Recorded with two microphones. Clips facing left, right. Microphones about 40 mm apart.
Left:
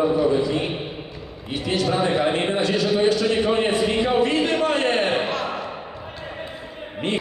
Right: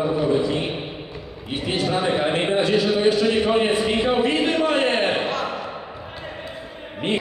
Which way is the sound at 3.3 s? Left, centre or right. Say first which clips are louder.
Right 1 dB; centre.